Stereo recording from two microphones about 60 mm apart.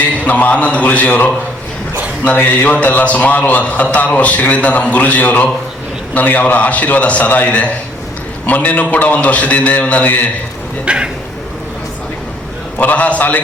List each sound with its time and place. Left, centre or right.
0.3 s a man's voice: left
10.8 s speech: centre
12.8 s a man's voice: left